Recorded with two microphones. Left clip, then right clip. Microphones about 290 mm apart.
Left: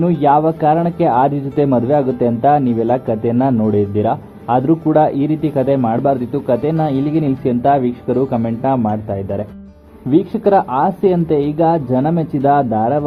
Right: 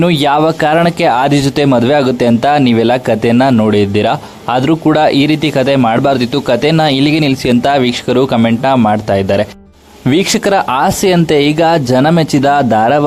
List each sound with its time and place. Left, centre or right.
0.0 s speech: right